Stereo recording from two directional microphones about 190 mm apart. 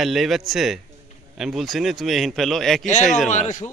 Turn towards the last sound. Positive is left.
turn(degrees=40)  # may be behind; listen again after turning